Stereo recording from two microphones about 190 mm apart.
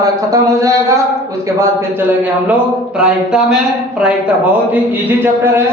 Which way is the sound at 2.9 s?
5° right (ahead or behind).